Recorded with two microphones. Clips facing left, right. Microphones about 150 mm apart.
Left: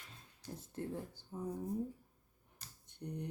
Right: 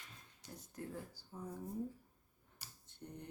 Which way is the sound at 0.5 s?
25° left (ahead or behind).